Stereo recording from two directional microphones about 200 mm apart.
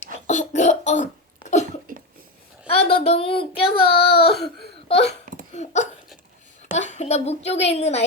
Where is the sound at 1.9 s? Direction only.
45° right (ahead or behind).